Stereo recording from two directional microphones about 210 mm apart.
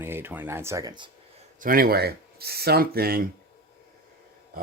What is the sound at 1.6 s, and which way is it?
Speech, 45° right (ahead or behind).